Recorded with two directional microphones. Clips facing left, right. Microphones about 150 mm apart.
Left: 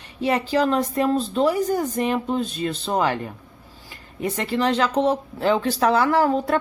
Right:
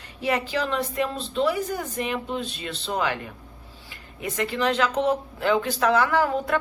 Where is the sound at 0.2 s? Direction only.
30° left (ahead or behind).